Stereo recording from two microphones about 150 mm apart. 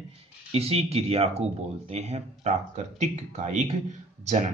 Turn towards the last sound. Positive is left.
turn(degrees=-55)  # may be behind; listen again after turning